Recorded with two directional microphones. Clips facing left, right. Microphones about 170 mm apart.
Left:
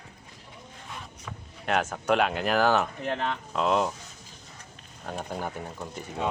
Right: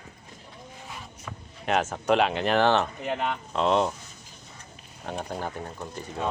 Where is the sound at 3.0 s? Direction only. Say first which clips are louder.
Right 1 dB; 10° right (ahead or behind).